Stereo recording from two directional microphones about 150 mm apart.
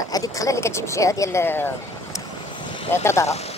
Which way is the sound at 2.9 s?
15° left (ahead or behind).